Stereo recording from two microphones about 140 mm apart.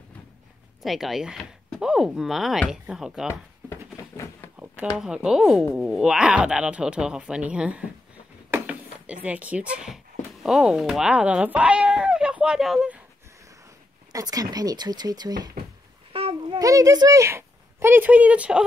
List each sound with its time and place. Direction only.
0.8 s speech: centre (ahead or behind)
3.6 s a sound: 20° left (ahead or behind)
4.9 s speech: 5° right (ahead or behind)
14.1 s speech: 25° right (ahead or behind)
16.1 s babbling: 40° right (ahead or behind)
16.5 s speech: 25° right (ahead or behind); by 18.6 s 10° right (ahead or behind)